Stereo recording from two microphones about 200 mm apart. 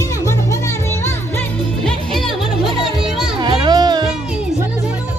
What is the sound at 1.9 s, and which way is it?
Music, centre (ahead or behind).